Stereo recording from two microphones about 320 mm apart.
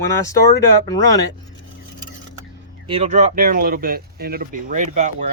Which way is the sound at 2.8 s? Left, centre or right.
Centre.